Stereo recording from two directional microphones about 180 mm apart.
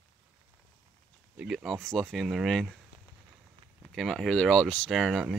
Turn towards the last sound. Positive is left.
turn(degrees=-5)  # may be behind; listen again after turning